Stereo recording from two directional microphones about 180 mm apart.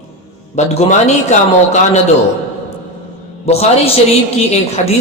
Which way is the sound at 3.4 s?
35° left (ahead or behind).